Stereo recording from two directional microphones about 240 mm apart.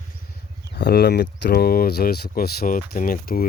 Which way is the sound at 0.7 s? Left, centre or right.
Left.